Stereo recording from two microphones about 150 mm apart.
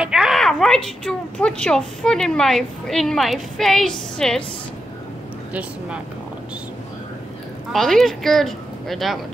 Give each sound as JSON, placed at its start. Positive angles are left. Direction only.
{"t": 0.0, "sound": "a woman's voice", "side_deg": -5}
{"t": 5.5, "sound": "speech", "side_deg": -10}
{"t": 7.7, "sound": "a woman's voice", "side_deg": 0}